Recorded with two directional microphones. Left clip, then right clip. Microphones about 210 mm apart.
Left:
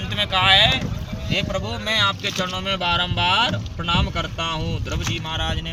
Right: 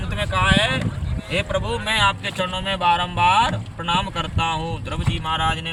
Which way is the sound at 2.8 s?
25° right (ahead or behind).